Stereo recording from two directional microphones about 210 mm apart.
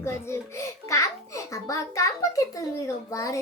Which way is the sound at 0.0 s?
10° left (ahead or behind).